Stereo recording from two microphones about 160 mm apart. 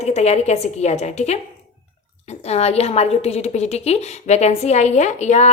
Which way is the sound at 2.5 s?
40° left (ahead or behind).